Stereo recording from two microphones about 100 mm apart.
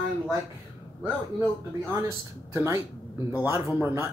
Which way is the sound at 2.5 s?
25° right (ahead or behind).